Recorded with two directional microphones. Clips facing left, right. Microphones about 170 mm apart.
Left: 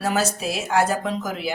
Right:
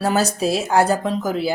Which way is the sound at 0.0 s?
35° right (ahead or behind).